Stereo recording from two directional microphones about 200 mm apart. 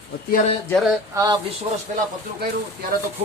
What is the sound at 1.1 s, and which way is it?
Speech, 15° right (ahead or behind).